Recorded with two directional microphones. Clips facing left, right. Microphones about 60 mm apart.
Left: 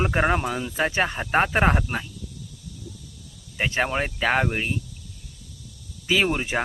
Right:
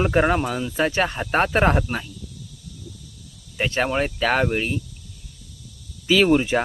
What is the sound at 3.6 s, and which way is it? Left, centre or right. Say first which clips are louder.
Speech: right 2 dB; centre.